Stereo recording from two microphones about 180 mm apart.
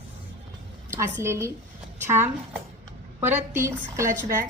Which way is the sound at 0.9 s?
15° right (ahead or behind).